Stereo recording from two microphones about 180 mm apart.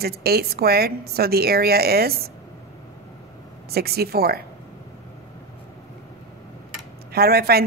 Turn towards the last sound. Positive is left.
turn(degrees=-60)  # may be behind; listen again after turning